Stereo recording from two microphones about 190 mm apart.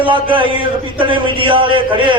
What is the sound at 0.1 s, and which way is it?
A man's voice, 25° right (ahead or behind).